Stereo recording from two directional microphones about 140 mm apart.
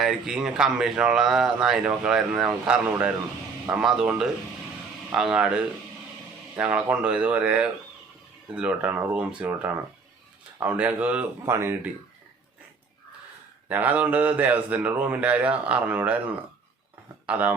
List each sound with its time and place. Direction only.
0.0 s a man's voice: 5° right (ahead or behind)
13.7 s a man's voice: 10° right (ahead or behind)